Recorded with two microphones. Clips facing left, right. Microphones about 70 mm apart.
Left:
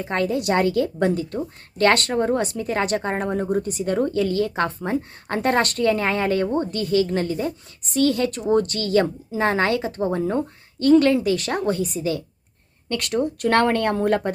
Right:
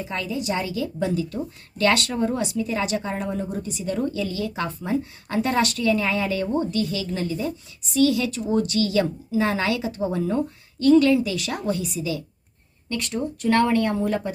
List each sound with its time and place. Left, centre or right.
0.0 s speech: left
12.9 s speech: left